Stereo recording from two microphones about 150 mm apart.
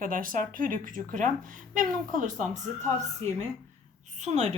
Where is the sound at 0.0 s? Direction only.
65° right (ahead or behind).